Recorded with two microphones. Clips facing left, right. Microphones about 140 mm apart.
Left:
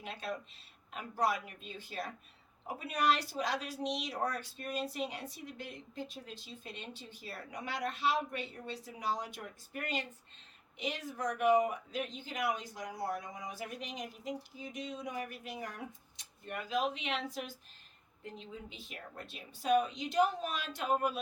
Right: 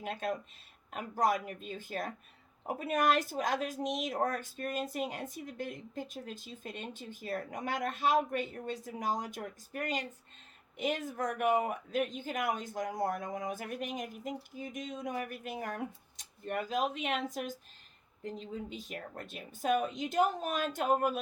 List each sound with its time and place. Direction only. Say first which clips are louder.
0.0 s a woman's voice: right 5 dB; 50° right (ahead or behind)